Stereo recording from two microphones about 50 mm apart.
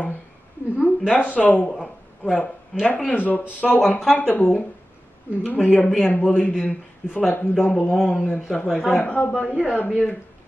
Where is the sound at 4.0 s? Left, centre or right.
Centre.